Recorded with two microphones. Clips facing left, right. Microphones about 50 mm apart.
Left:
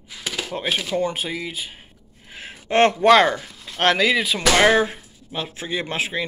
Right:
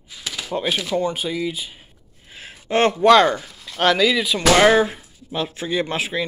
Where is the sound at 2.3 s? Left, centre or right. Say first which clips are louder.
Left 1 dB; left.